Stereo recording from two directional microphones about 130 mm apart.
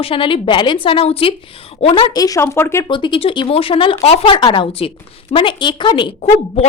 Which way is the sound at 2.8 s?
35° left (ahead or behind).